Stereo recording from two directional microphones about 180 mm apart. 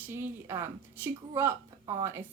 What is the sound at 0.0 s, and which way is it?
A woman's voice, 10° right (ahead or behind).